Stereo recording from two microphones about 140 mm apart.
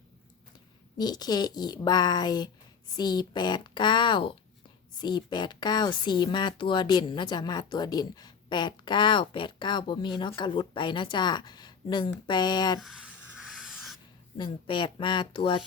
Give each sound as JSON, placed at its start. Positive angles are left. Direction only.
{"t": 0.9, "sound": "speech", "side_deg": 30}
{"t": 12.8, "sound": "a sound", "side_deg": -5}
{"t": 14.3, "sound": "speech", "side_deg": 35}